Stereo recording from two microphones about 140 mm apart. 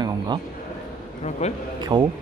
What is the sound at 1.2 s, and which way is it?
Speech, 55° left (ahead or behind).